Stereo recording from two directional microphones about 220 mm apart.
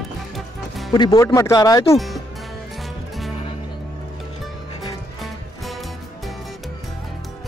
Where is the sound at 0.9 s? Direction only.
20° left (ahead or behind).